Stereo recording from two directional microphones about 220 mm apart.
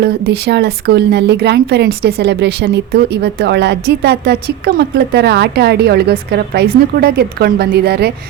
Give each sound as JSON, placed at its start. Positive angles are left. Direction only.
{"t": 0.0, "sound": "speech", "side_deg": -50}